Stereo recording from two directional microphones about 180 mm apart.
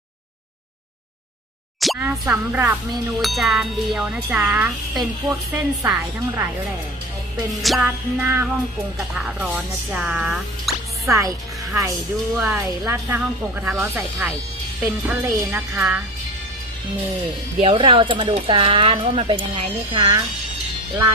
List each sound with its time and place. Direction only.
1.8 s music: centre (ahead or behind)
2.0 s speech: 10° right (ahead or behind)
3.2 s wind chime: centre (ahead or behind)
5.5 s speech: 10° right (ahead or behind)
7.6 s wind chime: centre (ahead or behind)
7.9 s speech: 10° right (ahead or behind)
9.0 s wind chime: 5° right (ahead or behind)
11.0 s speech: 15° right (ahead or behind)
12.4 s speech: 15° right (ahead or behind)
17.6 s speech: 30° right (ahead or behind)